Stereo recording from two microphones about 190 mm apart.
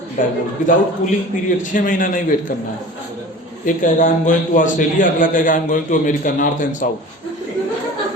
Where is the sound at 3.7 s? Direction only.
45° left (ahead or behind).